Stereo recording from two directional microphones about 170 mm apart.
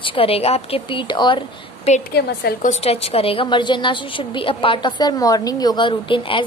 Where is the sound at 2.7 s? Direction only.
35° left (ahead or behind).